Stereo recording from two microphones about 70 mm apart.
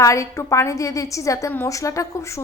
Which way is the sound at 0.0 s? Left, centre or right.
Left.